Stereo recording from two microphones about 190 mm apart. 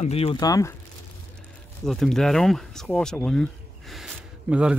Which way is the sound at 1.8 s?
Centre (ahead or behind).